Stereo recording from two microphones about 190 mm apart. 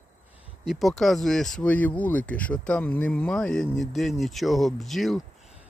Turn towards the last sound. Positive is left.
turn(degrees=0)  # may be behind; listen again after turning